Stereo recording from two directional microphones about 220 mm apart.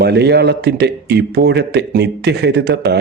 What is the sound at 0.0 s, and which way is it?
A man's voice, 50° right (ahead or behind).